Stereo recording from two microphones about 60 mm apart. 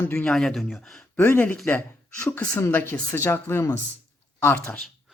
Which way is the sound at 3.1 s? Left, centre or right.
Left.